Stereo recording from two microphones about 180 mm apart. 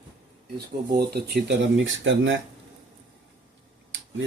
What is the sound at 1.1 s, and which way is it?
Speech, 65° right (ahead or behind).